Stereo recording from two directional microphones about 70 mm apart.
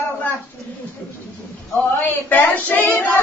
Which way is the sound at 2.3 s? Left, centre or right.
Left.